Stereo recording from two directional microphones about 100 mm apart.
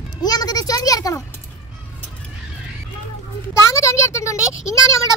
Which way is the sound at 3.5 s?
30° left (ahead or behind).